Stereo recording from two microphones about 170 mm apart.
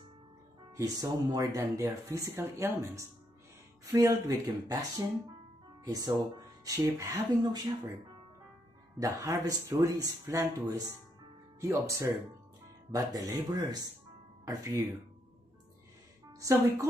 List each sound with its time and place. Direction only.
0.7 s speech: 20° right (ahead or behind)
9.0 s speech: 20° right (ahead or behind)
16.3 s speech: 20° right (ahead or behind)